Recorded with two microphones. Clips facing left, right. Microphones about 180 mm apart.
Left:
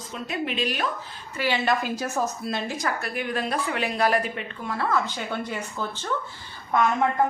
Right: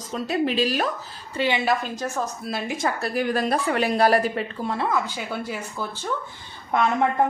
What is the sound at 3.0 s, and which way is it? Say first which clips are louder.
Speech: right 5 dB; 35° right (ahead or behind).